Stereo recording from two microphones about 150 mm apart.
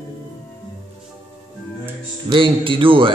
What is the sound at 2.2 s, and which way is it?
Speech, 35° right (ahead or behind).